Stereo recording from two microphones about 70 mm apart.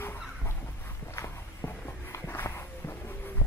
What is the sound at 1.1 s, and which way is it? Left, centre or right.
Walk, left.